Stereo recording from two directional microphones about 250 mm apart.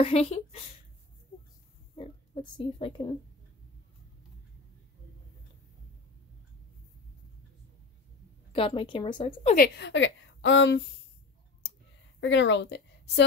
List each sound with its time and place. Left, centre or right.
0.0 s speech: left
2.0 s speech: centre
8.5 s speech: left
9.6 s speech: left
12.2 s a woman's voice: left